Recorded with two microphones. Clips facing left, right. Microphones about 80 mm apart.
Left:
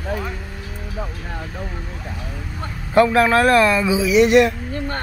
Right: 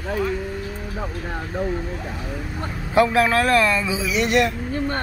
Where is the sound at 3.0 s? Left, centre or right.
Centre.